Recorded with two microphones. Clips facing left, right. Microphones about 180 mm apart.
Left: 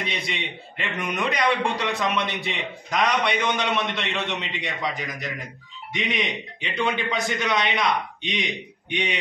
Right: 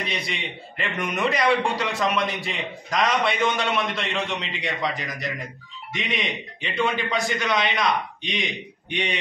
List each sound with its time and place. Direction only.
0.7 s a man's voice: centre (ahead or behind)